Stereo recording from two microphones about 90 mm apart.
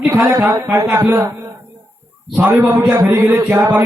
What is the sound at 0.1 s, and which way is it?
A man's voice, 30° right (ahead or behind).